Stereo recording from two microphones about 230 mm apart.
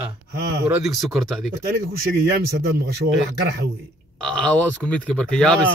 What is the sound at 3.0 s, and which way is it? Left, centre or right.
Speech, right.